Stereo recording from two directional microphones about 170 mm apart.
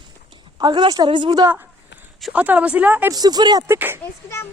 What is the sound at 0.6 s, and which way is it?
Speech, 25° right (ahead or behind).